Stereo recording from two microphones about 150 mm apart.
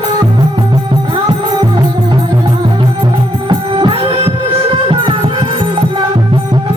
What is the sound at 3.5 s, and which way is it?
Music, 30° right (ahead or behind).